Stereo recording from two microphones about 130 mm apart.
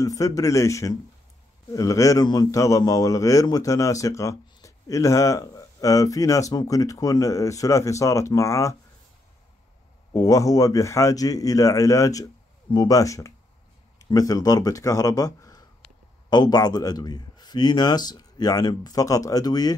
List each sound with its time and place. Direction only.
0.0 s speech: 25° left (ahead or behind)
10.1 s a man's voice: 25° left (ahead or behind)